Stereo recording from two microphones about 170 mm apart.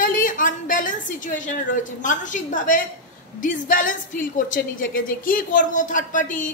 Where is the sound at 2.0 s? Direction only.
50° left (ahead or behind).